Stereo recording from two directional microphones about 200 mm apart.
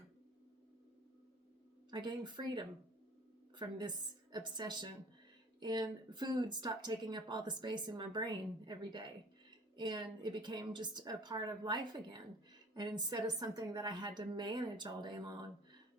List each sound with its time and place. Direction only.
1.9 s speech: 20° right (ahead or behind)